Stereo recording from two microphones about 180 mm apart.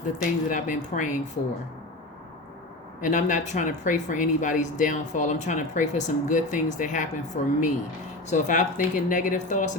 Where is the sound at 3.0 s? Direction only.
45° left (ahead or behind).